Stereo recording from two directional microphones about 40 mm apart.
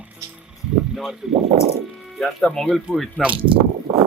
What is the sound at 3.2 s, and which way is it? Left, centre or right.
Speech, left.